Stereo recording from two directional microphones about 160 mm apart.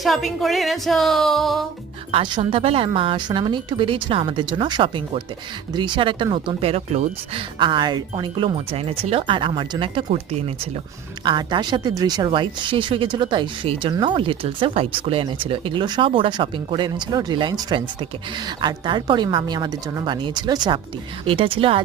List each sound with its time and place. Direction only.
0.0 s speech: centre (ahead or behind)
2.1 s speech: 35° right (ahead or behind)
11.3 s a woman's voice: 30° right (ahead or behind)